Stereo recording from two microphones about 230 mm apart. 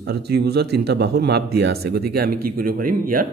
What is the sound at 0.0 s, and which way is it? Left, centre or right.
Speech, right.